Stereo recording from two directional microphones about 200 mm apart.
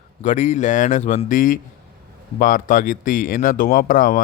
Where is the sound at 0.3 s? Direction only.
40° left (ahead or behind).